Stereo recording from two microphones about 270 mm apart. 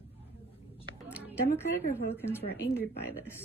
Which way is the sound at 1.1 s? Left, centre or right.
Centre.